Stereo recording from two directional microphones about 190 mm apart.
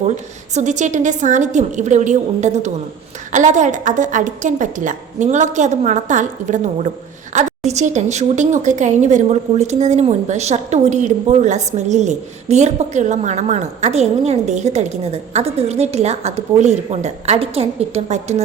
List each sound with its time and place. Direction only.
0.5 s a woman's voice: 40° right (ahead or behind)